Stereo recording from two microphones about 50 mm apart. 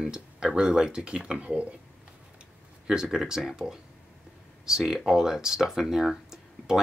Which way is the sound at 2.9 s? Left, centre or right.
Centre.